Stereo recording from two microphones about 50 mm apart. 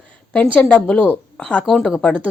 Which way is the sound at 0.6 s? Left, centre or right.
Centre.